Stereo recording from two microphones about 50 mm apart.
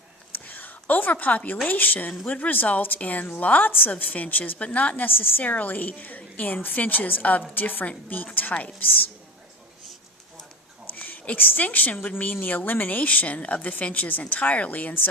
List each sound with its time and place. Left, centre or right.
0.4 s a sound: left
1.6 s speech: left
5.0 s a woman's voice: left
5.4 s speech: left
10.8 s a woman's voice: left